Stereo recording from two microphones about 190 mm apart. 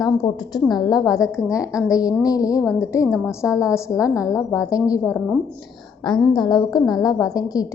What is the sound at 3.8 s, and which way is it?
A woman's voice, 15° left (ahead or behind).